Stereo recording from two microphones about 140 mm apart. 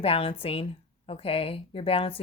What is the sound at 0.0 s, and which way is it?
Speech, 40° left (ahead or behind).